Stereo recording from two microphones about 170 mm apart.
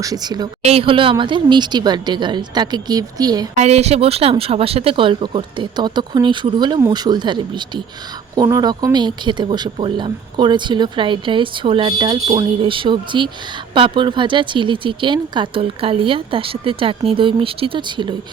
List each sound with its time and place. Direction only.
0.0 s speech: 20° right (ahead or behind)
0.6 s speech: 35° right (ahead or behind)
3.5 s speech: 40° right (ahead or behind)